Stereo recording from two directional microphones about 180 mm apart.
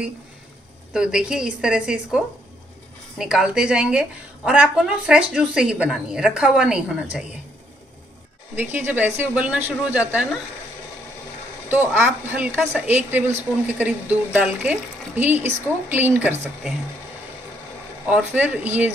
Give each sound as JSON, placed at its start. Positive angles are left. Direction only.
{"t": 0.9, "sound": "a woman's voice", "side_deg": -5}
{"t": 8.5, "sound": "a woman's voice", "side_deg": -10}
{"t": 11.7, "sound": "a woman's voice", "side_deg": -10}
{"t": 18.0, "sound": "a woman's voice", "side_deg": -5}